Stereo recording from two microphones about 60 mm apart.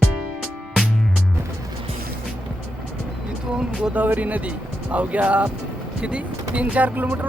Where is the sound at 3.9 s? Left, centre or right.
Right.